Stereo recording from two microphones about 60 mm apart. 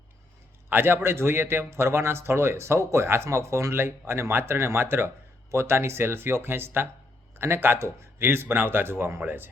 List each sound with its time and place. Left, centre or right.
0.7 s a man's voice: right